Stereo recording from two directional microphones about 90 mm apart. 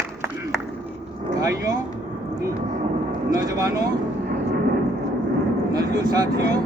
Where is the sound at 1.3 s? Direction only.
40° right (ahead or behind).